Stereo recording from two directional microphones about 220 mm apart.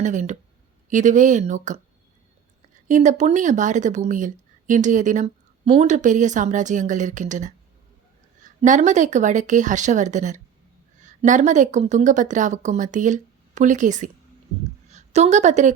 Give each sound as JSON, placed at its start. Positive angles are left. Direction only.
{"t": 0.0, "sound": "speech", "side_deg": -35}
{"t": 2.8, "sound": "a woman's voice", "side_deg": -35}